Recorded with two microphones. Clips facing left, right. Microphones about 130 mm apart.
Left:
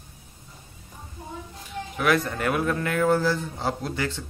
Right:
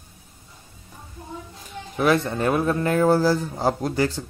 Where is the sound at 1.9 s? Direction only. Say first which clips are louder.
Right 3 dB; 30° right (ahead or behind).